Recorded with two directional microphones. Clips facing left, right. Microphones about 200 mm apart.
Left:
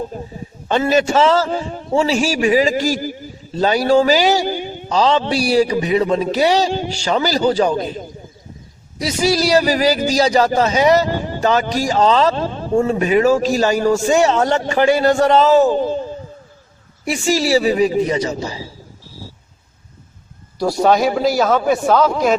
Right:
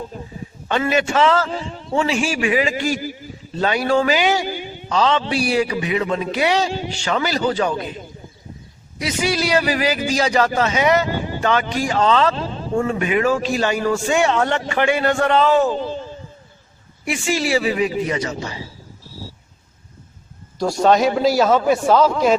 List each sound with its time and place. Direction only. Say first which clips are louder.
0.7 s a man's voice: left 4 dB; 35° left (ahead or behind)
15.7 s a sound: left 6 dB; 45° left (ahead or behind)
17.1 s a man's voice: left 4 dB; 40° left (ahead or behind)
20.6 s a man's voice: left 1 dB; 10° left (ahead or behind)